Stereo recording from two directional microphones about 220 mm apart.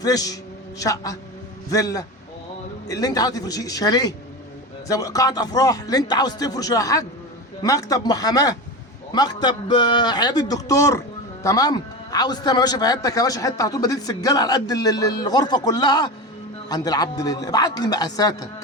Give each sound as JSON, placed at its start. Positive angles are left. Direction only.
{"t": 0.0, "sound": "a man's voice", "side_deg": 15}